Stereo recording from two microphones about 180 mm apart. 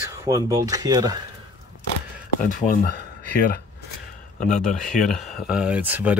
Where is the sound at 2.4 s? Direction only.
50° left (ahead or behind).